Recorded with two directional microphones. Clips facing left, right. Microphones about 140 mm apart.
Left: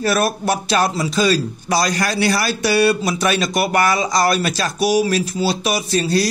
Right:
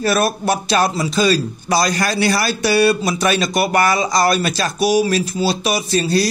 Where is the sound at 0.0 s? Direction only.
30° right (ahead or behind).